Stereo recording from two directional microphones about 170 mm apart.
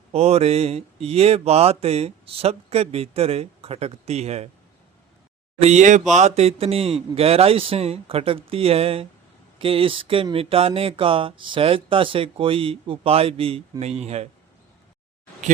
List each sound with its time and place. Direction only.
0.1 s speech: 35° right (ahead or behind)
5.6 s speech: 45° right (ahead or behind)